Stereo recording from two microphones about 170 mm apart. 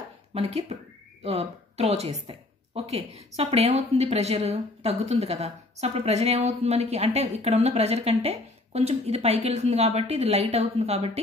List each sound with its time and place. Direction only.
0.3 s speech: 40° right (ahead or behind)